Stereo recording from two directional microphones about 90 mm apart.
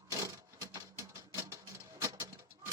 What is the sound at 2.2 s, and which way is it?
Bird, 40° right (ahead or behind).